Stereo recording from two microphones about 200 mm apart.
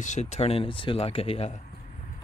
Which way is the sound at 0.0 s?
35° left (ahead or behind).